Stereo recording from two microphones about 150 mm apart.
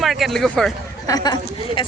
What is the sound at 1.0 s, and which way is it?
Speech, 25° left (ahead or behind).